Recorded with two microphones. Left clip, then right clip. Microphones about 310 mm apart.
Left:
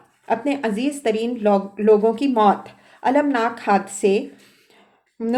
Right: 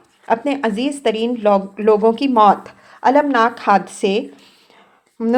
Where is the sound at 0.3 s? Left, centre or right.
Right.